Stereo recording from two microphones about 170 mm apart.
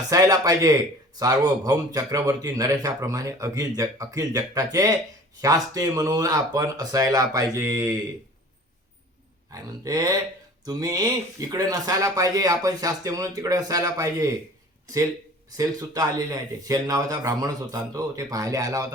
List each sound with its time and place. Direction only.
0.1 s speech: 20° right (ahead or behind)
9.5 s speech: 20° right (ahead or behind)
16.0 s speech: 20° right (ahead or behind)